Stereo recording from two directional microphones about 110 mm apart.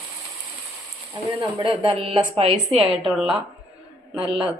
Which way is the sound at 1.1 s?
45° right (ahead or behind).